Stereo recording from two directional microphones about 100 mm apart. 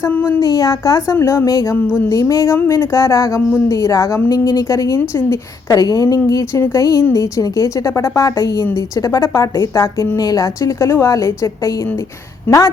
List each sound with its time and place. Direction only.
0.1 s speech: 20° left (ahead or behind)
0.3 s a woman's voice: 35° left (ahead or behind)
1.1 s a woman's voice: 25° left (ahead or behind)